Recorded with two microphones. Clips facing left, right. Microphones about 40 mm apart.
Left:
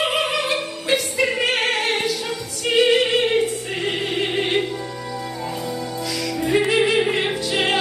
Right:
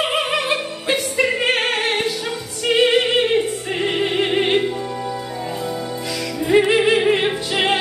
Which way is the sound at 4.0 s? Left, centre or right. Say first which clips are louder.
Right 5 dB; right.